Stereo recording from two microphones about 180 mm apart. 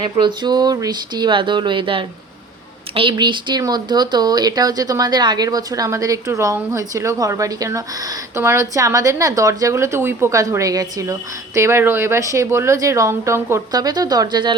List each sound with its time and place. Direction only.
0.0 s speech: 25° right (ahead or behind)